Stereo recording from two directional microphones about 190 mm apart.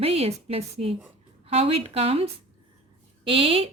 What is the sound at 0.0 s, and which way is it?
Speech, 30° right (ahead or behind).